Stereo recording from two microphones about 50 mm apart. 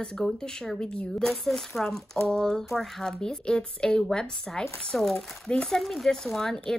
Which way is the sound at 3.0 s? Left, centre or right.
Centre.